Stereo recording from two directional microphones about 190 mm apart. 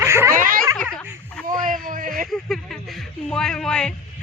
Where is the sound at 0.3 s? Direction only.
45° right (ahead or behind).